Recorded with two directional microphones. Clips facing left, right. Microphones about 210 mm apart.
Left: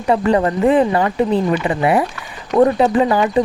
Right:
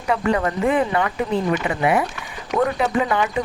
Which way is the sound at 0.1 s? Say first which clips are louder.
Left 5 dB; 35° left (ahead or behind).